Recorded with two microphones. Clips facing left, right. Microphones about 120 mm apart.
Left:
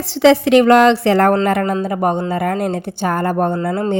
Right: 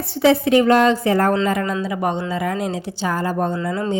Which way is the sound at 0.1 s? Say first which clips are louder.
Left 4 dB; 90° left.